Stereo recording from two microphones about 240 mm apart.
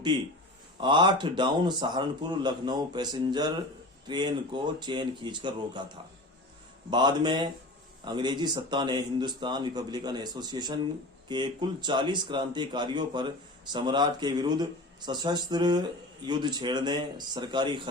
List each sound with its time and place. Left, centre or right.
0.8 s a man's voice: centre
6.9 s a man's voice: centre